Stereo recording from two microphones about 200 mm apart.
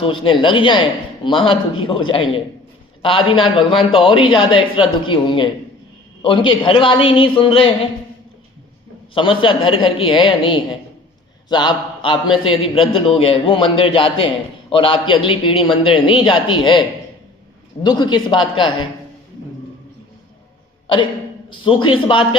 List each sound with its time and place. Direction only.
0.0 s speech: 25° left (ahead or behind)
9.1 s speech: 25° left (ahead or behind)
17.8 s speech: 20° left (ahead or behind)
21.5 s speech: 25° left (ahead or behind)